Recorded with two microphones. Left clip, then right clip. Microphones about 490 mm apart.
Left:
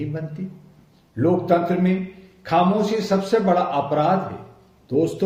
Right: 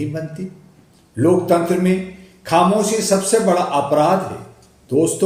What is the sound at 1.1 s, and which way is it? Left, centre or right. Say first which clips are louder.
Speech: right 4 dB; left.